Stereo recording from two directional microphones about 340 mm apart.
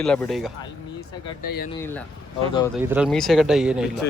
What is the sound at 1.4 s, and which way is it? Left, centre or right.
Speech, left.